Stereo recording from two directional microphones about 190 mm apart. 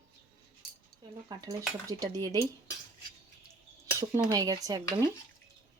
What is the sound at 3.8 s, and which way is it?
Speech, 20° right (ahead or behind).